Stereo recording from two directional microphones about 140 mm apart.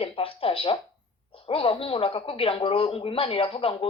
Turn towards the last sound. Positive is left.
turn(degrees=40)  # may be behind; listen again after turning